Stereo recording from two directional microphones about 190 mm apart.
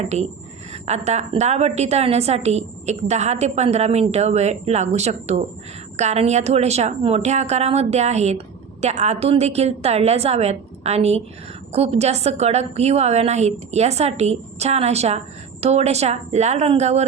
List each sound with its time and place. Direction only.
0.0 s a woman's voice: 35° right (ahead or behind)